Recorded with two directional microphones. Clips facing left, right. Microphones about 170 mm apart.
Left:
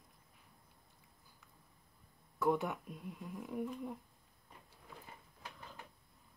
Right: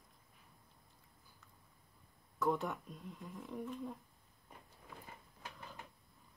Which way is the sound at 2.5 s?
5° left (ahead or behind).